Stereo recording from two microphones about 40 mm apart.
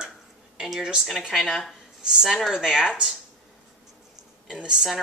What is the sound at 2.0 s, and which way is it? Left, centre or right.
Speech, centre.